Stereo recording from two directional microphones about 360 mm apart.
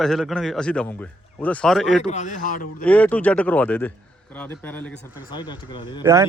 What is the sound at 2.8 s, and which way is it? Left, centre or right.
A man's voice, centre.